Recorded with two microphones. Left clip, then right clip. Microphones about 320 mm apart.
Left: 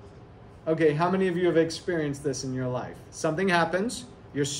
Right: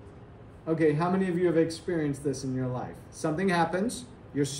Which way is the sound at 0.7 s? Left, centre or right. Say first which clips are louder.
Left 2 dB; centre.